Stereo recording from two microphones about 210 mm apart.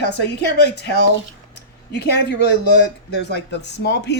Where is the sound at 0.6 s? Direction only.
50° left (ahead or behind).